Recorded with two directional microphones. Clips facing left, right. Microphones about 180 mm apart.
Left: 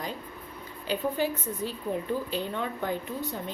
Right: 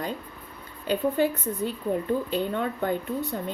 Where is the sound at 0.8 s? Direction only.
55° right (ahead or behind).